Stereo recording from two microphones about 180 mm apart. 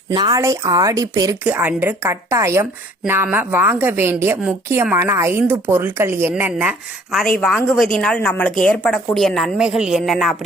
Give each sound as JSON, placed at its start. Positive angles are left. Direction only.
{"t": 0.1, "sound": "a woman's voice", "side_deg": -20}